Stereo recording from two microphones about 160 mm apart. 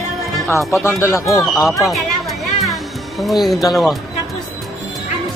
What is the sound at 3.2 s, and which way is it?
Speech, centre (ahead or behind).